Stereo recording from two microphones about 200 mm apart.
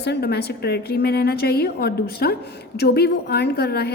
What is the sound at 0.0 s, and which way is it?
A woman's voice, 55° left (ahead or behind).